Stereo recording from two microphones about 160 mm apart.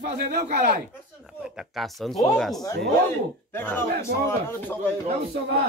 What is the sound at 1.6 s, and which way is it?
Speech, centre (ahead or behind).